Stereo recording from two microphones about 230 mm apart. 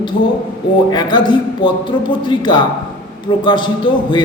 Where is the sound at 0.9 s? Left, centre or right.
Centre.